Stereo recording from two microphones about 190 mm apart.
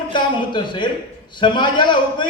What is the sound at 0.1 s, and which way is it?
A man's voice, 25° left (ahead or behind).